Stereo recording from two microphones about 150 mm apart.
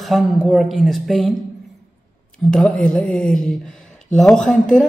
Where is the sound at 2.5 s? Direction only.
5° left (ahead or behind).